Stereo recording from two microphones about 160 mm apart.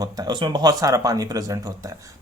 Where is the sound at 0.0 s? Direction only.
25° right (ahead or behind).